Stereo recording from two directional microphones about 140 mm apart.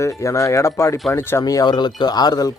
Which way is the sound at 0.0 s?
20° left (ahead or behind).